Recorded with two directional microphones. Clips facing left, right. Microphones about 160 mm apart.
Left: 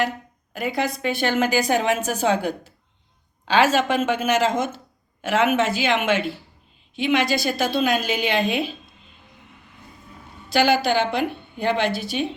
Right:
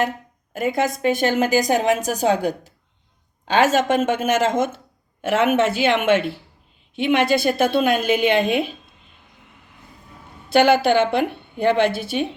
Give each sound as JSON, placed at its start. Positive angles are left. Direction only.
{"t": 0.5, "sound": "a woman's voice", "side_deg": -50}
{"t": 10.5, "sound": "a woman's voice", "side_deg": -55}